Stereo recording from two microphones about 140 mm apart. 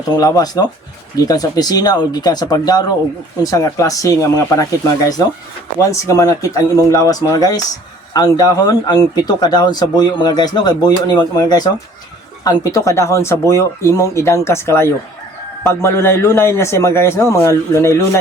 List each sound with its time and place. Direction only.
0.1 s speech: 25° left (ahead or behind)